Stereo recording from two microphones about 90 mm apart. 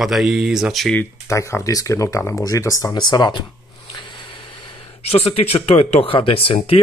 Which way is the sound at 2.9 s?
50° left (ahead or behind).